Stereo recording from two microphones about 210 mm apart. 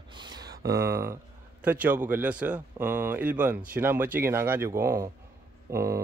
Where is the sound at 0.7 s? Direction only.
15° right (ahead or behind).